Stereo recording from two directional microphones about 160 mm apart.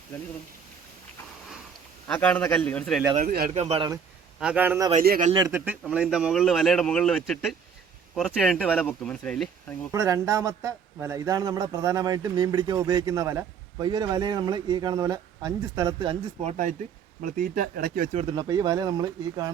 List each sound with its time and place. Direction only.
2.0 s a man's voice: 10° left (ahead or behind)
3.2 s speech: 65° right (ahead or behind)
3.5 s speech: 40° right (ahead or behind)
4.4 s a man's voice: 10° right (ahead or behind)
9.9 s a man's voice: 20° right (ahead or behind)
16.5 s speech: 55° right (ahead or behind)
18.1 s speech: 40° right (ahead or behind)
18.3 s a man's voice: 25° right (ahead or behind)